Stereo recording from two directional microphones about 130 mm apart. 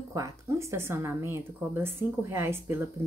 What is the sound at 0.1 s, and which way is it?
A woman's voice, 25° right (ahead or behind).